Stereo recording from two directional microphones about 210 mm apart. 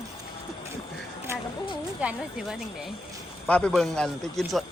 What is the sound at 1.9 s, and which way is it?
Speech, 5° right (ahead or behind).